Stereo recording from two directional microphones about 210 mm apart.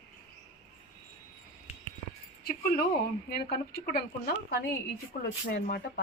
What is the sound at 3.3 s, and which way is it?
Speech, 50° left (ahead or behind).